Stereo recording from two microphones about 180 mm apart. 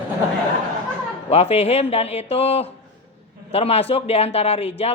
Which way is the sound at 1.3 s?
35° left (ahead or behind).